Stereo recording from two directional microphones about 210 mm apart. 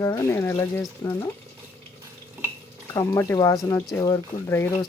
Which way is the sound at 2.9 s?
15° left (ahead or behind).